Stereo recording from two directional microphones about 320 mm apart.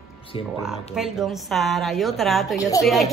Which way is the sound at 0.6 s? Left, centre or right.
Centre.